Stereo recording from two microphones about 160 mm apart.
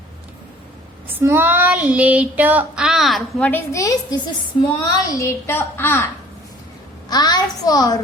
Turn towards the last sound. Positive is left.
turn(degrees=25)  # may be behind; listen again after turning